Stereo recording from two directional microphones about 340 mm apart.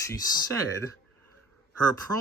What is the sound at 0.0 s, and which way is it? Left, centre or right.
Speech, centre.